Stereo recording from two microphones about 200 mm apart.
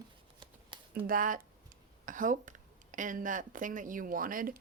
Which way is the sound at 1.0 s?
45° right (ahead or behind).